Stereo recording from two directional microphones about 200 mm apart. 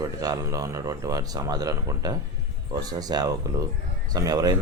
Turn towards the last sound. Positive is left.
turn(degrees=-20)  # may be behind; listen again after turning